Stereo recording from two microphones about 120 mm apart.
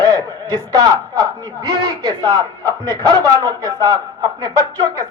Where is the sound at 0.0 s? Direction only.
35° right (ahead or behind).